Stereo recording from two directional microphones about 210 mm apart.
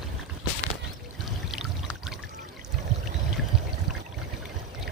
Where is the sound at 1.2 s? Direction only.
Centre (ahead or behind).